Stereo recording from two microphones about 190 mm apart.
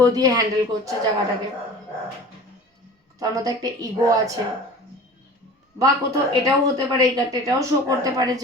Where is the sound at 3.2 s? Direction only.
20° right (ahead or behind).